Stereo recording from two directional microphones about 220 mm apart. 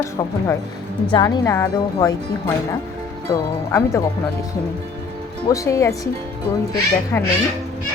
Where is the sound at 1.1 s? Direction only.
15° left (ahead or behind).